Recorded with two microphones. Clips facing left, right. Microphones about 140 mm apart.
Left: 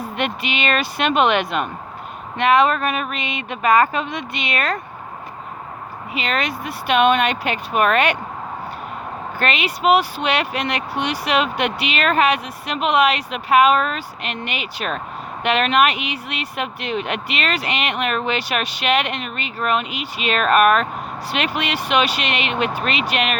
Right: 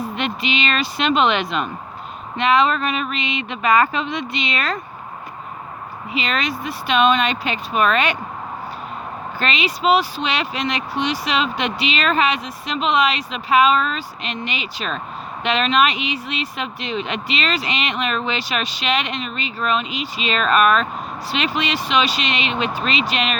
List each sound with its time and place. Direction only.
0.2 s speech: 55° left (ahead or behind)
6.1 s speech: 55° left (ahead or behind)
9.4 s speech: 60° left (ahead or behind)